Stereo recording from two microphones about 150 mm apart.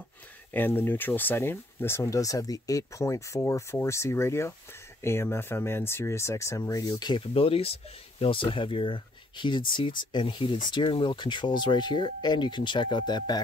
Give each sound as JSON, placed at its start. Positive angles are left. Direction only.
{"t": 0.5, "sound": "speech", "side_deg": 15}